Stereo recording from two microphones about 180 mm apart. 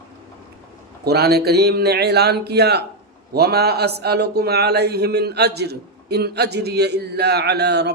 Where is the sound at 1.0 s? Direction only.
65° right (ahead or behind).